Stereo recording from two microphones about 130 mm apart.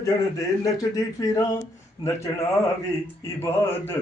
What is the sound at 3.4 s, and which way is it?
Speech, 15° left (ahead or behind).